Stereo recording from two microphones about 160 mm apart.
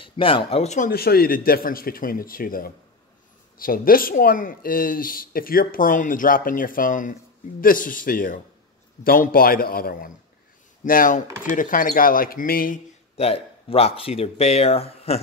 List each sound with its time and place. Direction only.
0.0 s speech: 35° left (ahead or behind); by 12.8 s 60° left (ahead or behind)
13.2 s speech: 40° left (ahead or behind)